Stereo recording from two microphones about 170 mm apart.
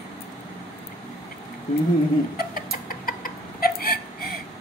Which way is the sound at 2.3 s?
60° left (ahead or behind).